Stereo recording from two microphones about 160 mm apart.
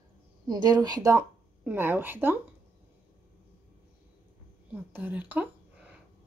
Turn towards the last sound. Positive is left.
turn(degrees=-10)  # may be behind; listen again after turning